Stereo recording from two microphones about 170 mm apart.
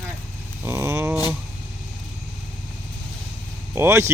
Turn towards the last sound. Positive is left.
turn(degrees=-15)  # may be behind; listen again after turning